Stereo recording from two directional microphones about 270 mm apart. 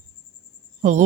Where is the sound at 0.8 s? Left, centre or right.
Right.